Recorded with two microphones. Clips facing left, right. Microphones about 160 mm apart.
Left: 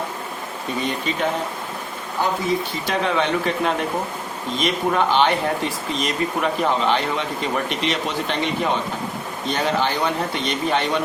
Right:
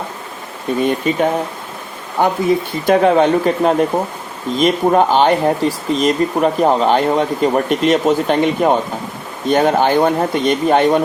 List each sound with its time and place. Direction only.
0.7 s speech: 50° right (ahead or behind)
2.2 s speech: 60° right (ahead or behind)
2.8 s speech: 50° right (ahead or behind)